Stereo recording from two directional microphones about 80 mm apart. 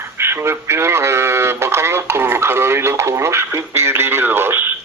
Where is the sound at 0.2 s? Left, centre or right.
Right.